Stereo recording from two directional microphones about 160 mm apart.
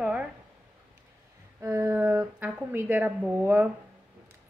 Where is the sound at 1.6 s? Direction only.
20° right (ahead or behind).